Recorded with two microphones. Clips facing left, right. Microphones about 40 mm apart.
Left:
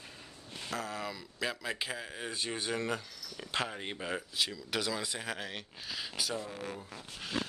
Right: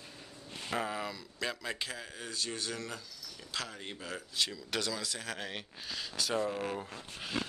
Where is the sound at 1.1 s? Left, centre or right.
Centre.